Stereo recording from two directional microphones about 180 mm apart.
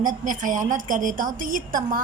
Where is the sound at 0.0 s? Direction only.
45° right (ahead or behind).